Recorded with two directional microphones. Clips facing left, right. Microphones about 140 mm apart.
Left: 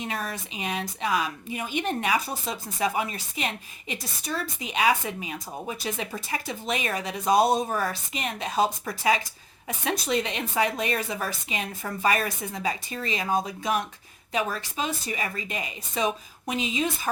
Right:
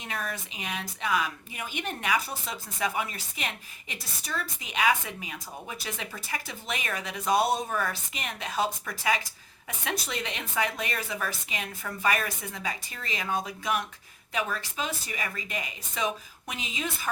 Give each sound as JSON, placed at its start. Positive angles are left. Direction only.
{"t": 0.0, "sound": "a woman's voice", "side_deg": 30}